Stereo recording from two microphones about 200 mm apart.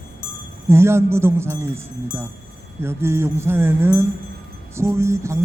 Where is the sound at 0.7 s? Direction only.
10° right (ahead or behind).